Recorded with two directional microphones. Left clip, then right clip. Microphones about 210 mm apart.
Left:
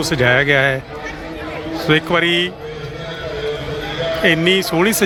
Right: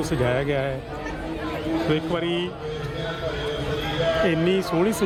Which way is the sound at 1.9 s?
10° left (ahead or behind).